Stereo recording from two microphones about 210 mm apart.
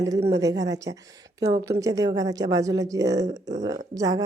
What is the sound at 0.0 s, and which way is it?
A woman's voice, 15° right (ahead or behind).